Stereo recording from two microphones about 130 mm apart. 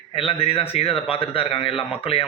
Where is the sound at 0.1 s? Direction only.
45° left (ahead or behind).